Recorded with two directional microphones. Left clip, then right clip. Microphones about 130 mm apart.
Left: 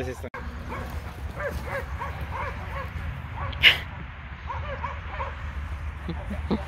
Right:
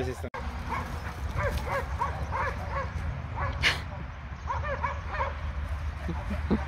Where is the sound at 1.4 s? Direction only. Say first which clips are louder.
Even; 5° right (ahead or behind).